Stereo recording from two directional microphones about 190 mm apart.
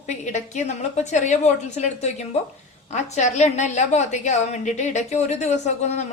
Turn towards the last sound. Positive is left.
turn(degrees=35)  # may be behind; listen again after turning